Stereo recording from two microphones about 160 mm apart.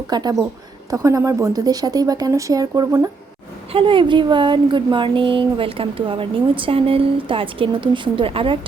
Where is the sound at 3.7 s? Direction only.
35° right (ahead or behind).